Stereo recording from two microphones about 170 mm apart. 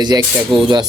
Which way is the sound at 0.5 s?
Centre (ahead or behind).